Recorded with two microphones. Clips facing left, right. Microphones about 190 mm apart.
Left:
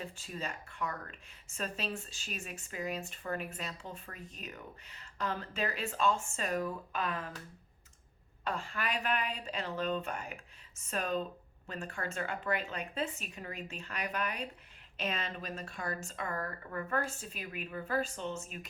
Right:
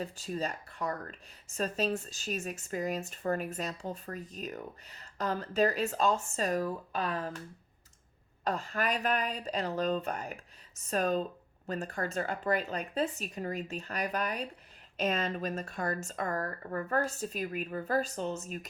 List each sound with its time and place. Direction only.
0.0 s speech: 40° right (ahead or behind)
8.4 s speech: 40° right (ahead or behind)